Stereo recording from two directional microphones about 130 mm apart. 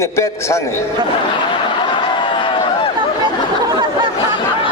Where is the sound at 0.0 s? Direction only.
20° left (ahead or behind).